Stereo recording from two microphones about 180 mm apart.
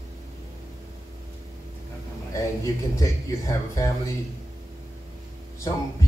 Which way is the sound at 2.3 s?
15° left (ahead or behind).